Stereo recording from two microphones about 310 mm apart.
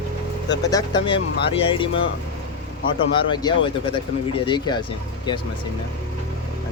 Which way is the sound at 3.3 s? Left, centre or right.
Centre.